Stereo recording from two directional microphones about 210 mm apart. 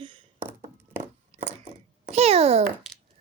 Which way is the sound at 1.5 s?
30° right (ahead or behind).